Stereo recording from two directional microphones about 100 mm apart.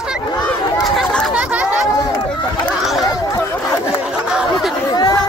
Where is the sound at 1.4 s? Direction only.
15° right (ahead or behind).